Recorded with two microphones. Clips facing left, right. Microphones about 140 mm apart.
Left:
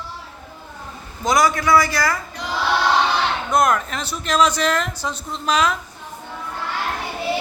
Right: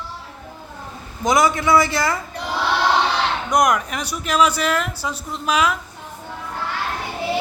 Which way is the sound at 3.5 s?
15° right (ahead or behind).